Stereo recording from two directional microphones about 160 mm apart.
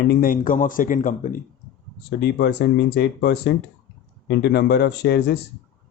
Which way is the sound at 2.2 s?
90° left.